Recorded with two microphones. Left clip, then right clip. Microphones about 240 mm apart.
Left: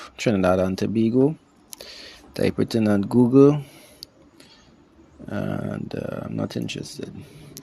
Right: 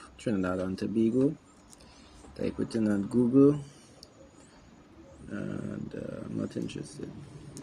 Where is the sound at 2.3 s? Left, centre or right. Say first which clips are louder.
Left 10 dB; left.